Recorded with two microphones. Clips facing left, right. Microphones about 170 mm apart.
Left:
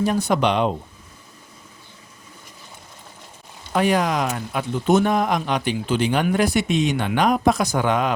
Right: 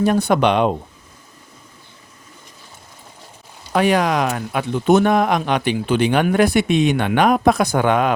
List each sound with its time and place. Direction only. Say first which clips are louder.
0.0 s speech: right 4 dB; 60° right (ahead or behind)
3.7 s speech: right 3 dB; 80° right; by 8.1 s 60° right (ahead or behind)